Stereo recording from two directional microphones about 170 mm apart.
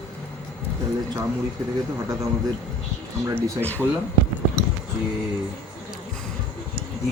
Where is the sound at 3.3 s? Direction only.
10° left (ahead or behind).